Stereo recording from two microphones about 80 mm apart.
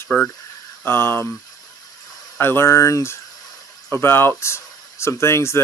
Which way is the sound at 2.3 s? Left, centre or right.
Left.